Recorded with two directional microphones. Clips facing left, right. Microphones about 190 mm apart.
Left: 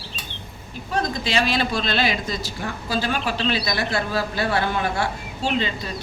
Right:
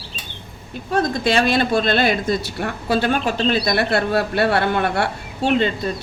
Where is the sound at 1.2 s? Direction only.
55° right (ahead or behind).